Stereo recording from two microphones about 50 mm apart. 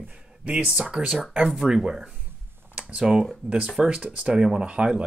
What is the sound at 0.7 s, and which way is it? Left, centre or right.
Speech, centre.